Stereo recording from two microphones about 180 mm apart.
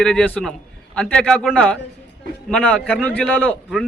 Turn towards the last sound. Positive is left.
turn(degrees=5)  # may be behind; listen again after turning